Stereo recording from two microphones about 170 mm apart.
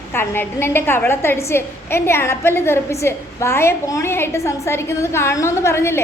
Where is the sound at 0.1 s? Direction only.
15° left (ahead or behind).